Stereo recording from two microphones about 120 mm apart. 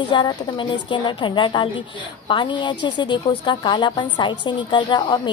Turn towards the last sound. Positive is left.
turn(degrees=40)  # may be behind; listen again after turning